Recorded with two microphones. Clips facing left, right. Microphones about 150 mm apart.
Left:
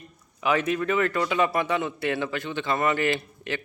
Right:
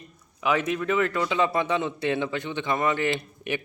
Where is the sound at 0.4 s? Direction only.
Centre (ahead or behind).